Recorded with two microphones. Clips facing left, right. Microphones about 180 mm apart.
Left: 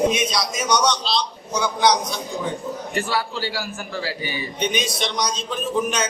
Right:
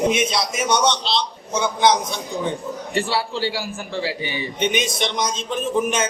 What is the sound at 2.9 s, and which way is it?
A man's voice, 30° right (ahead or behind).